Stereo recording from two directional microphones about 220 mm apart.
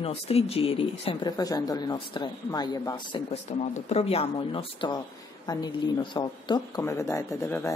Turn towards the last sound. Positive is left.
turn(degrees=10)  # may be behind; listen again after turning